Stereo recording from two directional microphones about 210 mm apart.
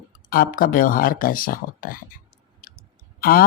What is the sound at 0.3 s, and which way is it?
Speech, 45° left (ahead or behind).